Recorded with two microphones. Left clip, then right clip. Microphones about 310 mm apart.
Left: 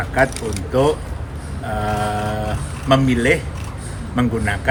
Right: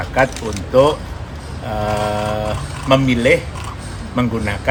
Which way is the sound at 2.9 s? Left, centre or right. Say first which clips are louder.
Right 2 dB; centre.